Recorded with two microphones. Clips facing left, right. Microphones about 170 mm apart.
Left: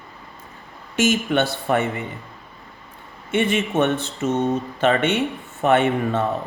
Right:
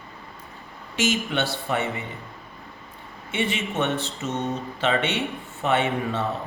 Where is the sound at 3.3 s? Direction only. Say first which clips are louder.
Left 7 dB; 50° left (ahead or behind).